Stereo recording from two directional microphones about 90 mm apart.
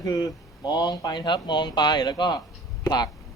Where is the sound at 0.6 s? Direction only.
55° left (ahead or behind).